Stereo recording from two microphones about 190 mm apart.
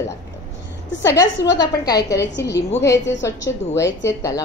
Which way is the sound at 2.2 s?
65° left (ahead or behind).